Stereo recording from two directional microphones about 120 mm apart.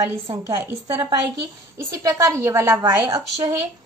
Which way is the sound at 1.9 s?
30° right (ahead or behind).